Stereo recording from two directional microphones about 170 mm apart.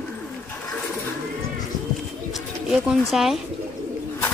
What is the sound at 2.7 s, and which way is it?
Speech, centre (ahead or behind).